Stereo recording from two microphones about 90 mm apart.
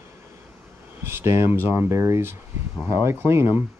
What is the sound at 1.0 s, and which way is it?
Speech, 30° right (ahead or behind).